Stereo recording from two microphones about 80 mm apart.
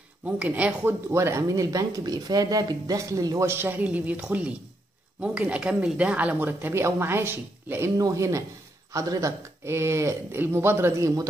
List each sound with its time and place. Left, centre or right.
0.2 s speech: centre
8.0 s speech: right